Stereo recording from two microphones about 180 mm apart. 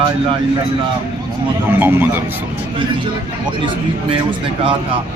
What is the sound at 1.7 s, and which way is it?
Speech, 10° right (ahead or behind).